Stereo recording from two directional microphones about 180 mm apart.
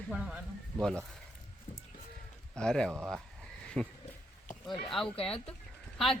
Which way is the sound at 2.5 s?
5° left (ahead or behind).